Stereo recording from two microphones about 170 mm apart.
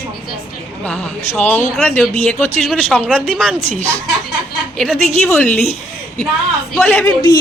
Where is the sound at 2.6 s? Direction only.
5° left (ahead or behind).